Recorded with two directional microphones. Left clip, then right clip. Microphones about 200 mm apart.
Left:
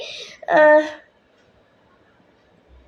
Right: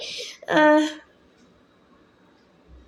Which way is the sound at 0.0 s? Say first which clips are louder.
Left 2 dB; 40° right (ahead or behind).